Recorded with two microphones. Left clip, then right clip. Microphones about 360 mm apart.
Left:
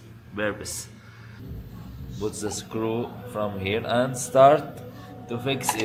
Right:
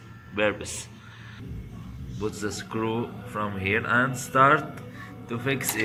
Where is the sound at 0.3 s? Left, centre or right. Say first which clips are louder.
Right 3 dB; centre.